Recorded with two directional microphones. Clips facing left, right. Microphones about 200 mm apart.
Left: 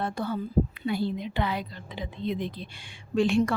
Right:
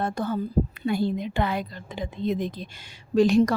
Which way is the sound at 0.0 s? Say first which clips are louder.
Right 3 dB; 45° right (ahead or behind).